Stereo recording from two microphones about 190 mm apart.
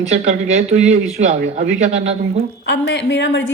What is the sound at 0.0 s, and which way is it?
A man's voice, 35° right (ahead or behind).